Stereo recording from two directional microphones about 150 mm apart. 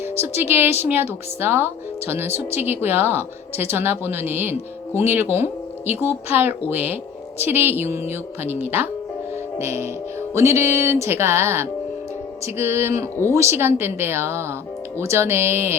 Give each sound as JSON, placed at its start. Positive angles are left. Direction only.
{"t": 0.0, "sound": "speech", "side_deg": -15}